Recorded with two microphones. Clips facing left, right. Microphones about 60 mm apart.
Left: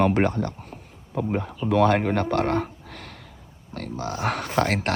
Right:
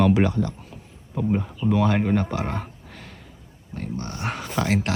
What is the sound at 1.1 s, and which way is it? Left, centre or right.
Speech, left.